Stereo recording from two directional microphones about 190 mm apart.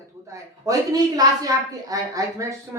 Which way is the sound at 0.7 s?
20° right (ahead or behind).